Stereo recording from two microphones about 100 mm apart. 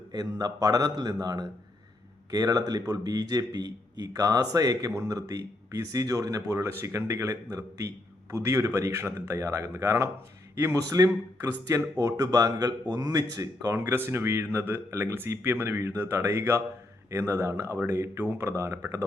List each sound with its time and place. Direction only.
0.1 s speech: 40° right (ahead or behind)
13.7 s speech: 25° right (ahead or behind)